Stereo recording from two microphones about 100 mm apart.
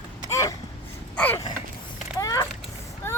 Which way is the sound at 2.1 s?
35° left (ahead or behind).